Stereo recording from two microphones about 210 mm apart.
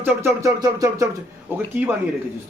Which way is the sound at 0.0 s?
15° right (ahead or behind).